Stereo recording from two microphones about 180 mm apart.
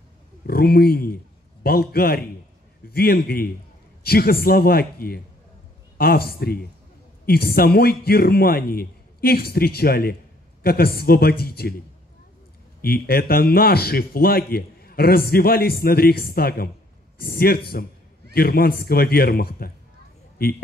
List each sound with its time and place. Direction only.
0.5 s a man's voice: 60° left (ahead or behind)
12.8 s a man's voice: 60° left (ahead or behind)